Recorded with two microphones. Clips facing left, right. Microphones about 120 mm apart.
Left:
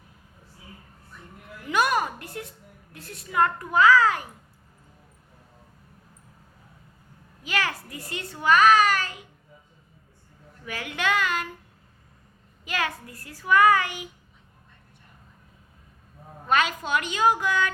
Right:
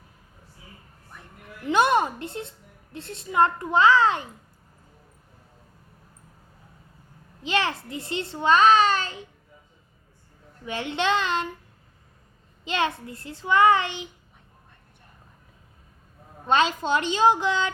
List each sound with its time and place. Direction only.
1.6 s a woman's voice: 25° right (ahead or behind)
7.4 s a child's voice: 25° right (ahead or behind)
10.7 s a child's voice: 25° right (ahead or behind)
12.6 s a child's voice: 25° right (ahead or behind)
16.5 s a child's voice: 25° right (ahead or behind)